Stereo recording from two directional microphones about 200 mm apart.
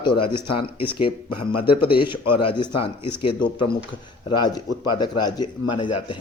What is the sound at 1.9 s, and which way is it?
Speech, 25° left (ahead or behind).